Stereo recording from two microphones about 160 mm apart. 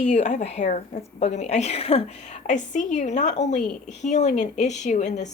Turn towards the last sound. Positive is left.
turn(degrees=50)  # may be behind; listen again after turning